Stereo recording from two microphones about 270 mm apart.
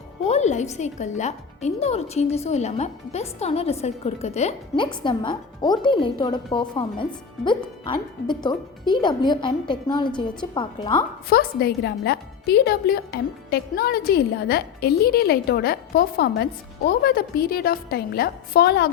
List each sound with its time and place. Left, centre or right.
0.3 s a woman's voice: left
11.3 s speech: left